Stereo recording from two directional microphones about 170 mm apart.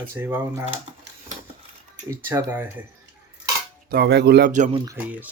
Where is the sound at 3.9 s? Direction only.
75° right (ahead or behind).